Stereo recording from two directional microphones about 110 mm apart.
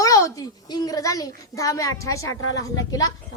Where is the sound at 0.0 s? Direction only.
30° left (ahead or behind).